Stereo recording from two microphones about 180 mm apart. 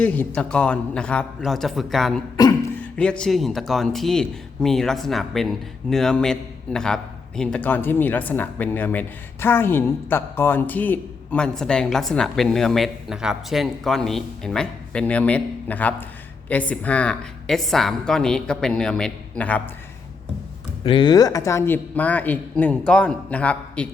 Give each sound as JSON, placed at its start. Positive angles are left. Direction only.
{"t": 0.0, "sound": "speech", "side_deg": 5}
{"t": 2.3, "sound": "beatboxing", "side_deg": 20}
{"t": 2.7, "sound": "a woman's voice", "side_deg": 5}
{"t": 20.8, "sound": "a woman's voice", "side_deg": 25}